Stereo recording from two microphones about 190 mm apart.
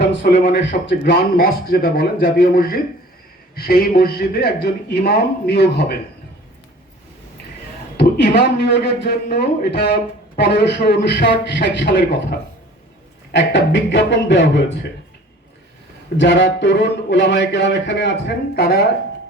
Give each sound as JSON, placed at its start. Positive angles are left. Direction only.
{"t": 0.0, "sound": "a man's voice", "side_deg": 65}
{"t": 7.9, "sound": "a man's voice", "side_deg": 55}
{"t": 13.3, "sound": "speech", "side_deg": 65}
{"t": 16.1, "sound": "speech", "side_deg": 70}